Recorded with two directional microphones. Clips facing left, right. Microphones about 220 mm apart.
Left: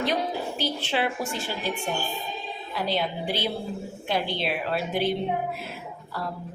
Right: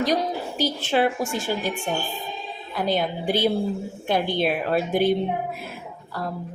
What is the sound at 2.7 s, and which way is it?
A woman's voice, 50° right (ahead or behind).